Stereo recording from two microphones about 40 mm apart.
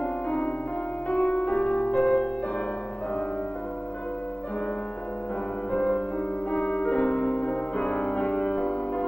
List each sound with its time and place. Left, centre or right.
0.0 s music: left
5.7 s music: left